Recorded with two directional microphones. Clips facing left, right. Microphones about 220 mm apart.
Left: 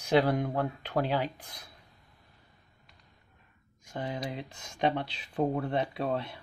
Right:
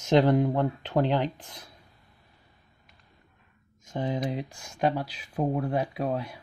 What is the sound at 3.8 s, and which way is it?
Speech, 20° right (ahead or behind).